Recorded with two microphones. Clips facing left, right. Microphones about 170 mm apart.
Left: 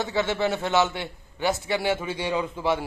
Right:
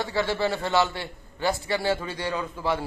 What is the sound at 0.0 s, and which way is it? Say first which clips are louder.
A man's voice: left 1 dB; 20° left (ahead or behind).